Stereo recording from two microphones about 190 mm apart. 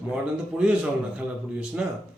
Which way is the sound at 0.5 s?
5° right (ahead or behind).